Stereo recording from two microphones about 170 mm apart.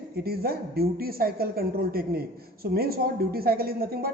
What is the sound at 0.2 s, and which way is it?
A woman's voice, 65° right (ahead or behind).